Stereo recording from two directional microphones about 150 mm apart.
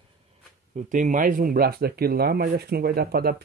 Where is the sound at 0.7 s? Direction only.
60° right (ahead or behind).